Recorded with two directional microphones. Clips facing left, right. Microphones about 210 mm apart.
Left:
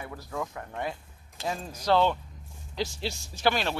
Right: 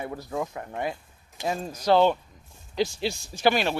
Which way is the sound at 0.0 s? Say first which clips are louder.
Right 5 dB; 25° right (ahead or behind).